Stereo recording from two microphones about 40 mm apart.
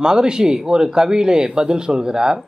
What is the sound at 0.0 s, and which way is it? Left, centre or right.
Speech, centre.